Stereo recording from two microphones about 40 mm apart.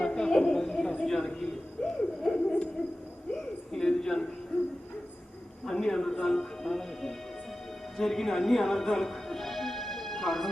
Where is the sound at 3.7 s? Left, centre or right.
Centre.